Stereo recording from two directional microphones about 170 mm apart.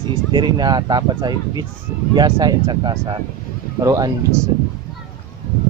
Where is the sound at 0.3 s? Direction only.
25° right (ahead or behind).